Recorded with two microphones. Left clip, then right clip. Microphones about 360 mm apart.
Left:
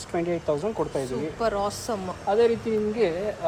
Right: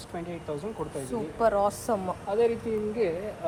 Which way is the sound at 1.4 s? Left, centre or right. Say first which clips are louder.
Right 3 dB; centre.